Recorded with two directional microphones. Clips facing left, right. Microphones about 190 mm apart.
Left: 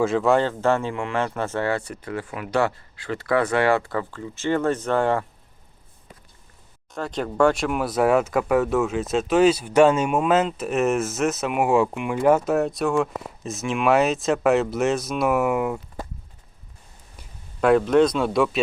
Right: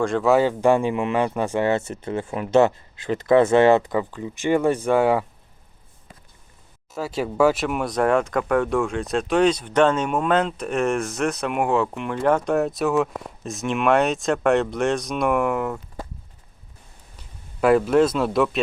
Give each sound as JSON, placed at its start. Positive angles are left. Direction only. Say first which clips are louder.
{"t": 0.0, "sound": "speech", "louder": "right 1 dB", "side_deg": 0}
{"t": 6.9, "sound": "speech", "louder": "right 1 dB", "side_deg": -5}
{"t": 17.6, "sound": "speech", "louder": "even", "side_deg": -5}